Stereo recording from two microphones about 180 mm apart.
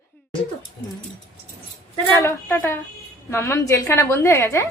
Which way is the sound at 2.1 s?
10° left (ahead or behind).